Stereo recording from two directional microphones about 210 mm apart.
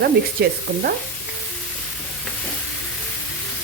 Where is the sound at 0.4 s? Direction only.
50° right (ahead or behind).